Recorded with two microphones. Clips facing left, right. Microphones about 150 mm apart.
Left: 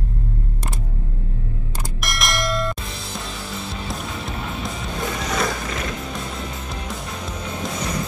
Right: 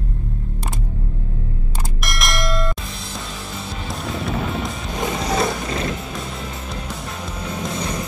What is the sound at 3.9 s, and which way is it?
Music, centre (ahead or behind).